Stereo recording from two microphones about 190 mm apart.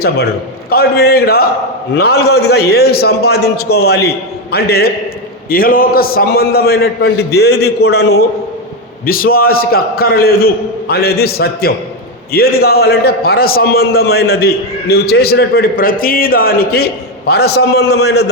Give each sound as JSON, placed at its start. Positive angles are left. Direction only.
{"t": 0.0, "sound": "a man's voice", "side_deg": 55}